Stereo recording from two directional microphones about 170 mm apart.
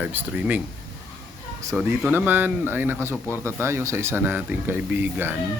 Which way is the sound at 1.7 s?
10° right (ahead or behind).